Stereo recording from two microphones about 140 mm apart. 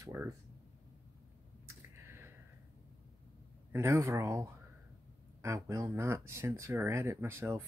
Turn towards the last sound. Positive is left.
turn(degrees=-20)  # may be behind; listen again after turning